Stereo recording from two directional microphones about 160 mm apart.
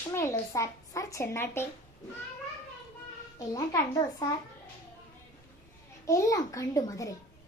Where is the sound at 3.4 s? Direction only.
20° left (ahead or behind).